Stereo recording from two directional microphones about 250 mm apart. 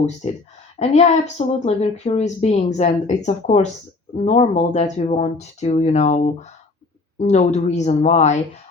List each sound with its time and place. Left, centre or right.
0.8 s speech: left